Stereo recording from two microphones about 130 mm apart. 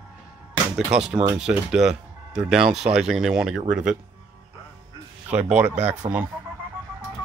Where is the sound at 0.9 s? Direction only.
5° right (ahead or behind).